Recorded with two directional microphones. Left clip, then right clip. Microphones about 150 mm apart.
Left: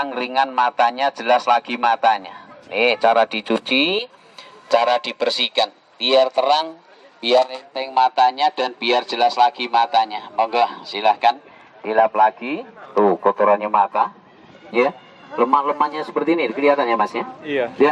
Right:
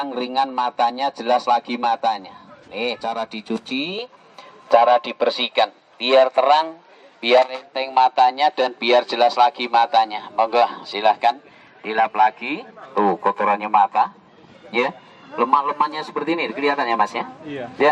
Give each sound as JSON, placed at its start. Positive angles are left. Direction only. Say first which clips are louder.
{"t": 0.0, "sound": "a man's voice", "louder": "left 2 dB", "side_deg": 10}
{"t": 11.8, "sound": "a man's voice", "louder": "left 2 dB", "side_deg": -25}
{"t": 16.9, "sound": "speech", "louder": "even", "side_deg": -35}
{"t": 17.4, "sound": "a man's voice", "louder": "left 9 dB", "side_deg": 10}